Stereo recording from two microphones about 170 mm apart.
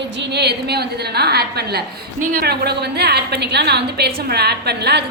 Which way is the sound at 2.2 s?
55° right (ahead or behind).